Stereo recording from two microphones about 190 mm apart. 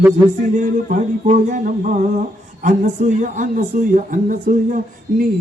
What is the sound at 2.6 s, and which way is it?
A woman's voice, 40° right (ahead or behind).